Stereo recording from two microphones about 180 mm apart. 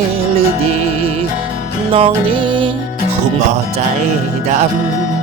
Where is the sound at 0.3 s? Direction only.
35° right (ahead or behind).